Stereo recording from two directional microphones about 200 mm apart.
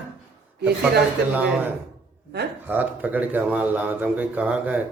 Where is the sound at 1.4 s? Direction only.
10° right (ahead or behind).